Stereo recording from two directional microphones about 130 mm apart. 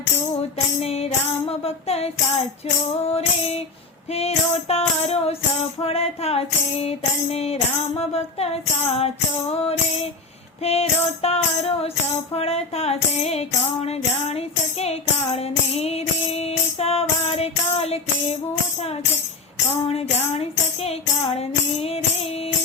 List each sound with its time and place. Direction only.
0.8 s music: 50° left (ahead or behind)
3.1 s music: 50° left (ahead or behind)
19.9 s music: 50° left (ahead or behind)